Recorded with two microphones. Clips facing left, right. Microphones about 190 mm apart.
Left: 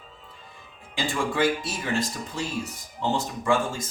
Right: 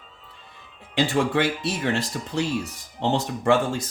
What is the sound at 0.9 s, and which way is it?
Speech, 65° right (ahead or behind).